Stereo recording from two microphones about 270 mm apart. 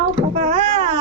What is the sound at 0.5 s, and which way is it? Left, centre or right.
Speech, right.